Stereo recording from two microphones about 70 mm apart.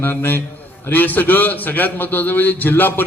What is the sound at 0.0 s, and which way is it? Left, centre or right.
A man's voice, left.